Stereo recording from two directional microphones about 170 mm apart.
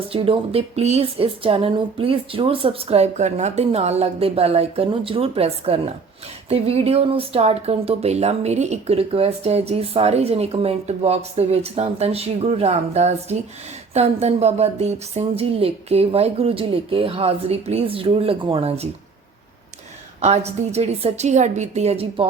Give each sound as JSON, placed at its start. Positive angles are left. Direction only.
{"t": 0.1, "sound": "speech", "side_deg": -35}
{"t": 20.2, "sound": "speech", "side_deg": -40}